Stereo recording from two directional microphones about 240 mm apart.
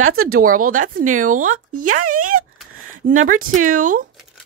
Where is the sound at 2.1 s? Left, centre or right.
Right.